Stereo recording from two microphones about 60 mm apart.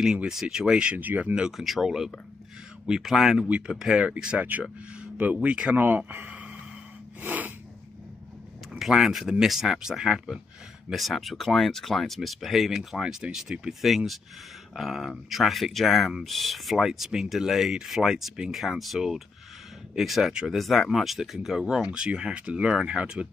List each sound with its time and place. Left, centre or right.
0.0 s speech: centre
0.9 s speech: right
1.6 s speech: centre
4.0 s speech: centre
4.4 s speech: right
7.2 s snort: right
8.7 s speech: centre